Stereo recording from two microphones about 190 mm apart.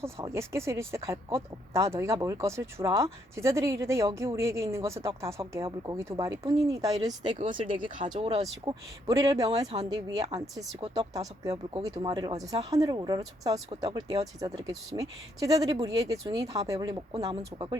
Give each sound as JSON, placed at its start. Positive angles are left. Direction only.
{"t": 0.0, "sound": "speech", "side_deg": -15}
{"t": 7.3, "sound": "speech", "side_deg": -40}
{"t": 8.6, "sound": "speech", "side_deg": -20}